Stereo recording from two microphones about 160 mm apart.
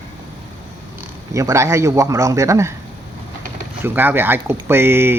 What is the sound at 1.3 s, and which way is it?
A man's voice, 20° right (ahead or behind).